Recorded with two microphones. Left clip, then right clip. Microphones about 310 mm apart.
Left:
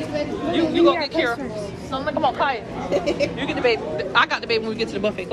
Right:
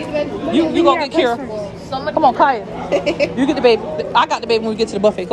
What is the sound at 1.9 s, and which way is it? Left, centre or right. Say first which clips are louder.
Speech: right 7 dB; right.